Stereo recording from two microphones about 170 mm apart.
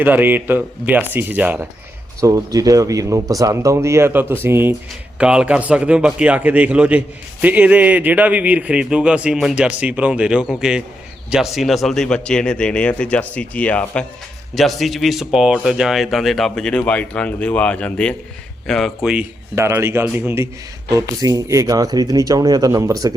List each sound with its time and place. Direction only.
0.0 s a man's voice: 10° right (ahead or behind); by 18.8 s 5° left (ahead or behind)
19.0 s a man's voice: 10° right (ahead or behind)